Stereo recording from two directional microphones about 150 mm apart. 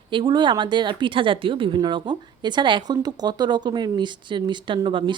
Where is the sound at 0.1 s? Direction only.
30° right (ahead or behind).